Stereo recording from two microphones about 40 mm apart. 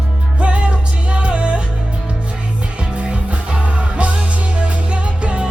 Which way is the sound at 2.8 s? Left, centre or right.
Right.